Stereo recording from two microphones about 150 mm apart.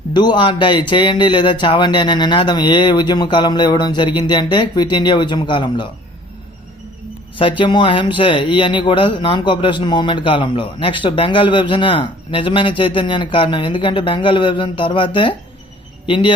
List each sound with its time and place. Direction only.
0.1 s speech: 30° left (ahead or behind)
7.3 s speech: 35° left (ahead or behind)